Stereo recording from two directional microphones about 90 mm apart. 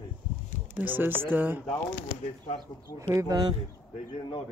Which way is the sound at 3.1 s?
40° right (ahead or behind).